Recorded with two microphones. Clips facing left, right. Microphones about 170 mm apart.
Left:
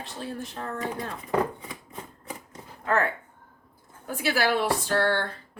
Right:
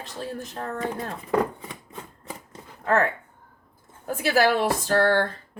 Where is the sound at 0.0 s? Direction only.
40° right (ahead or behind).